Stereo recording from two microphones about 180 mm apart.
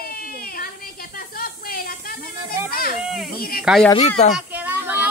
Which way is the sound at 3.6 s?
Centre (ahead or behind).